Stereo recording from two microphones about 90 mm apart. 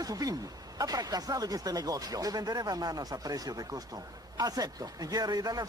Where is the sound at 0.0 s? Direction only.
45° right (ahead or behind).